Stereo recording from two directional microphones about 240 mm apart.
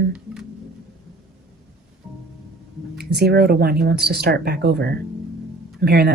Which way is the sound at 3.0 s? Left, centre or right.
Right.